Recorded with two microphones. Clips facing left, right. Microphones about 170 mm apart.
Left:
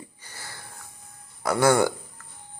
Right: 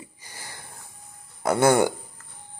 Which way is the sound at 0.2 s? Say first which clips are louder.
Even; 15° right (ahead or behind).